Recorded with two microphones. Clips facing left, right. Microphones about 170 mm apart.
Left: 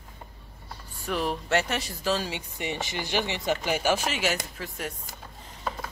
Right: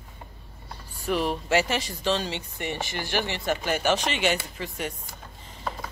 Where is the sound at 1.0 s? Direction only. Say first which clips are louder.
Right 3 dB; centre (ahead or behind).